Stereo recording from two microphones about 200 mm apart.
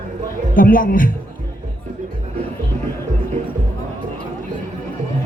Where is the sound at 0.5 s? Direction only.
45° left (ahead or behind).